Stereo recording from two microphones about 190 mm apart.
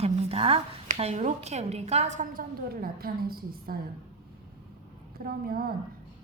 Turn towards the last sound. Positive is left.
turn(degrees=-50)  # may be behind; listen again after turning